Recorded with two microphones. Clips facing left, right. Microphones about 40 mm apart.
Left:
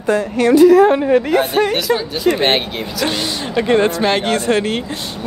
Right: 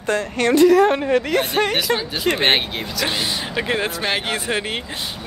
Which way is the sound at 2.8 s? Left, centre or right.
Centre.